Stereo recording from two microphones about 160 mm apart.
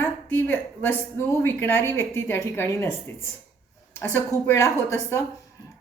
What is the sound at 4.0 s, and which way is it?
A woman's voice, 10° left (ahead or behind).